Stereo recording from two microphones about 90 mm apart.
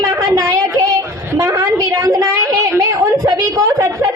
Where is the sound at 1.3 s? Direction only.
35° right (ahead or behind).